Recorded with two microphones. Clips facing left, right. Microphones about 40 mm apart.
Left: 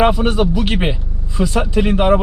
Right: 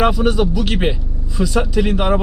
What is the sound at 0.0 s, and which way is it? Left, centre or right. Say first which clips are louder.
Speech: left 1 dB; centre.